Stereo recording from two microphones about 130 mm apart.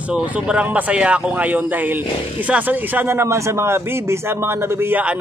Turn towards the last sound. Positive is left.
turn(degrees=-15)  # may be behind; listen again after turning